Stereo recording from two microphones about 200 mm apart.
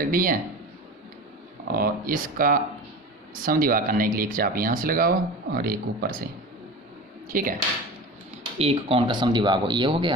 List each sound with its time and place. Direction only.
0.0 s speech: 45° right (ahead or behind)
1.7 s speech: 45° right (ahead or behind)
7.3 s speech: 45° right (ahead or behind)
8.5 s speech: 30° right (ahead or behind)